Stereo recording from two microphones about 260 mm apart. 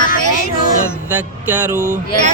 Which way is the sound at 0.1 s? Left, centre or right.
Left.